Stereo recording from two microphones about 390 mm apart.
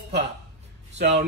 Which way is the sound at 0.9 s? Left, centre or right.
Centre.